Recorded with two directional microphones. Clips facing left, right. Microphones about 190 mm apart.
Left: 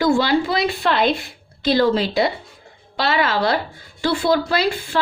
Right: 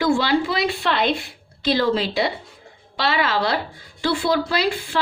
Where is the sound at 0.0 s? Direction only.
45° left (ahead or behind).